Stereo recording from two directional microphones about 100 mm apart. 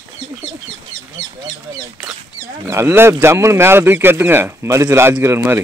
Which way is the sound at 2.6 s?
25° right (ahead or behind).